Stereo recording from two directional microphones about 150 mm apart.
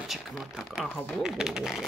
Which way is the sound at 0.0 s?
Centre (ahead or behind).